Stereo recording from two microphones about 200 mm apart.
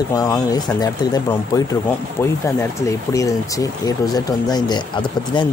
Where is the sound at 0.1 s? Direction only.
20° left (ahead or behind).